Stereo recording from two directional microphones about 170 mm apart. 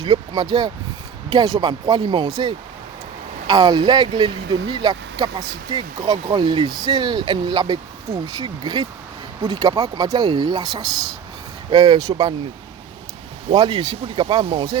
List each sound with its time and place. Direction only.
0.0 s speech: 25° right (ahead or behind)
13.5 s speech: 25° right (ahead or behind)